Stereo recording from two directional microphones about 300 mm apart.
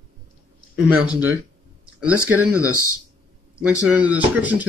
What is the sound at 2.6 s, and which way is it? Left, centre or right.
Speech, right.